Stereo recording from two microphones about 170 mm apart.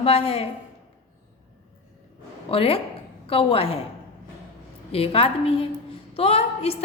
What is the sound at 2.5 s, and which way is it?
A woman's voice, 35° left (ahead or behind).